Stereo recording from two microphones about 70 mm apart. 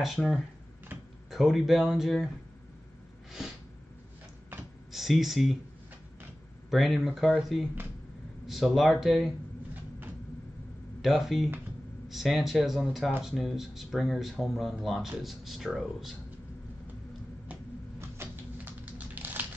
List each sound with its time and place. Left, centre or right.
0.0 s speech: centre
4.9 s speech: centre
6.7 s speech: centre
11.0 s speech: centre
18.1 s typing: right